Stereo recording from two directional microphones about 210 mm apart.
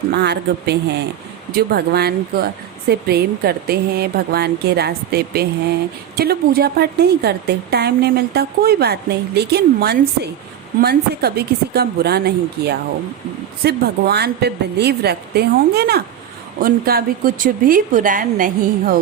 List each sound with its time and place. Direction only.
0.1 s a woman's voice: 50° right (ahead or behind)